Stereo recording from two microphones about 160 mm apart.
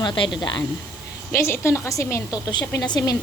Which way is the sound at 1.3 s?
15° left (ahead or behind).